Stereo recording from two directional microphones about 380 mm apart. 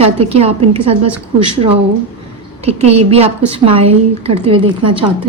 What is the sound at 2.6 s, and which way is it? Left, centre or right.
A woman's voice, centre.